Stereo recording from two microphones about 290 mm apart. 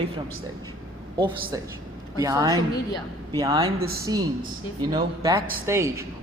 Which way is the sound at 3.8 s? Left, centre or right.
Right.